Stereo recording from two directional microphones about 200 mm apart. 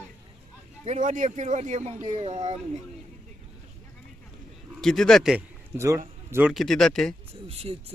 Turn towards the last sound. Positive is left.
turn(degrees=-30)  # may be behind; listen again after turning